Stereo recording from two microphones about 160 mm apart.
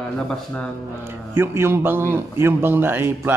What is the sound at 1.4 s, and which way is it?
A man's voice, 15° right (ahead or behind).